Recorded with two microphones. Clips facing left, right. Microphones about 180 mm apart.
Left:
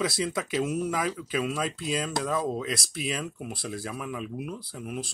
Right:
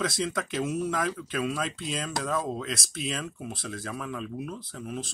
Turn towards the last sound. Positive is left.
turn(degrees=5)  # may be behind; listen again after turning